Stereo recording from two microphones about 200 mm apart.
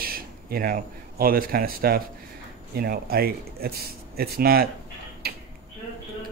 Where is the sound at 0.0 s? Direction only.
50° right (ahead or behind).